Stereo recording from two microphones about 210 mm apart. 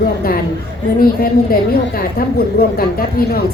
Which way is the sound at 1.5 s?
45° left (ahead or behind).